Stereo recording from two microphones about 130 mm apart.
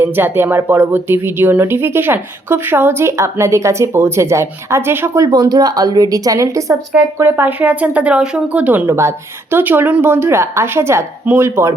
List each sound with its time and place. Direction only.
0.0 s speech: 15° right (ahead or behind)